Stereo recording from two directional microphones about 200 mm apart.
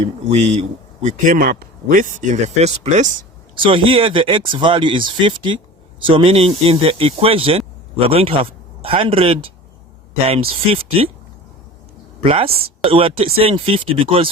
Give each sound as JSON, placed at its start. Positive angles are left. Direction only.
{"t": 0.3, "sound": "speech", "side_deg": -35}
{"t": 10.5, "sound": "speech", "side_deg": -30}
{"t": 12.2, "sound": "speech", "side_deg": -25}